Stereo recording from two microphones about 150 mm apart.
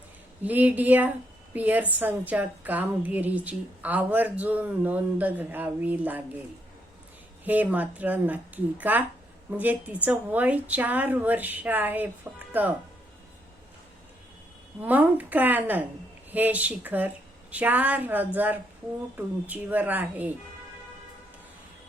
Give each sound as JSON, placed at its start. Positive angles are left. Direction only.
{"t": 0.4, "sound": "a woman's voice", "side_deg": -10}
{"t": 7.4, "sound": "a woman's voice", "side_deg": -10}
{"t": 14.8, "sound": "a woman's voice", "side_deg": -10}